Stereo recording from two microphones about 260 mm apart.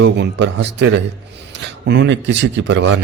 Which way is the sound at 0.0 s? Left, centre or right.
Right.